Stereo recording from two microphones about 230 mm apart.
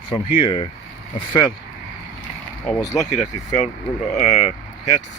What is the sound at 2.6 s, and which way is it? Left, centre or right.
Speech, centre.